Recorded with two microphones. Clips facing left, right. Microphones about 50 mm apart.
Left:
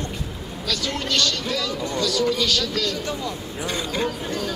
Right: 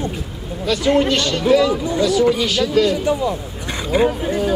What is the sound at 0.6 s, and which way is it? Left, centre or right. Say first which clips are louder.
A man's voice: right 11 dB; right.